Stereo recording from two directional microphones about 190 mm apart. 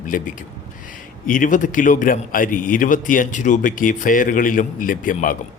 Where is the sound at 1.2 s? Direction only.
45° left (ahead or behind).